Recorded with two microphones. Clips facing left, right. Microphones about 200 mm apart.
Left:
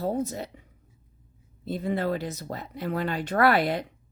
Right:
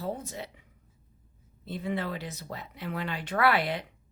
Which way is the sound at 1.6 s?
40° left (ahead or behind).